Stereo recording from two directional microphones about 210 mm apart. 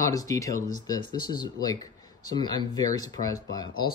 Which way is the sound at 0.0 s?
15° left (ahead or behind).